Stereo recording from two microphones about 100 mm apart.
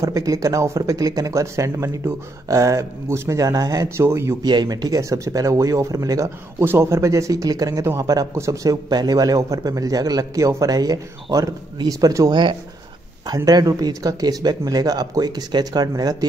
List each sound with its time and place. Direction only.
0.0 s speech: 35° right (ahead or behind)
4.4 s speech: 45° right (ahead or behind)
6.6 s speech: 25° right (ahead or behind)
12.3 s speech: 50° right (ahead or behind)
13.5 s speech: 40° right (ahead or behind)